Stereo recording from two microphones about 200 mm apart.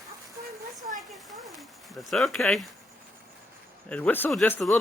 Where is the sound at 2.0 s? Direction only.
Centre (ahead or behind).